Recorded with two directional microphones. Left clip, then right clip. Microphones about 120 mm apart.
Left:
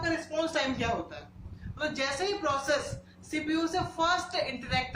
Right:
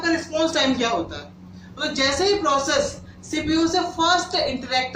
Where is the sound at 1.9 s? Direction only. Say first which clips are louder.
Right 12 dB; 45° left (ahead or behind).